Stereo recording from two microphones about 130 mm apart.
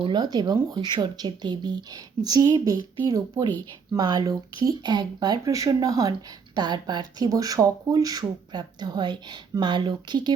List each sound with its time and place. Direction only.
0.0 s speech: 35° right (ahead or behind)